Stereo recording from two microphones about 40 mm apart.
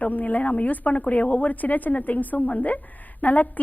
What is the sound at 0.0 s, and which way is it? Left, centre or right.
A woman's voice, left.